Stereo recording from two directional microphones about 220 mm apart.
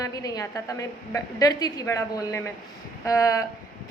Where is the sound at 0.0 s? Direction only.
15° left (ahead or behind).